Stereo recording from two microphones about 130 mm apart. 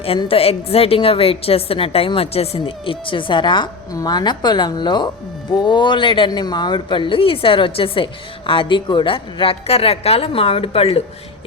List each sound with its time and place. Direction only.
0.2 s a woman's voice: 50° left (ahead or behind)